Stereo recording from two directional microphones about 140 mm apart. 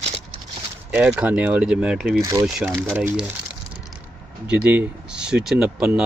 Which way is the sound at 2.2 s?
20° right (ahead or behind).